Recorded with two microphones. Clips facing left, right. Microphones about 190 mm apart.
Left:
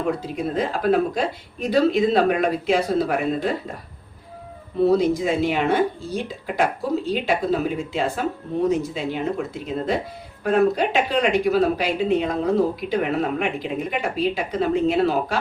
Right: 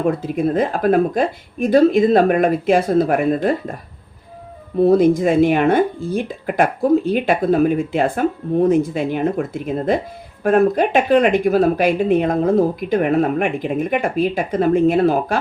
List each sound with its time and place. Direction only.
0.3 s speech: 50° right (ahead or behind)
4.9 s speech: 50° right (ahead or behind)